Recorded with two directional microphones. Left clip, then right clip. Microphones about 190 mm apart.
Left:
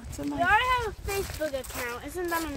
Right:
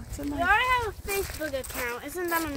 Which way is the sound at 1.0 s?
30° right (ahead or behind).